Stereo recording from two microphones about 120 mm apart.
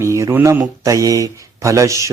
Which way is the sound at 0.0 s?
25° right (ahead or behind).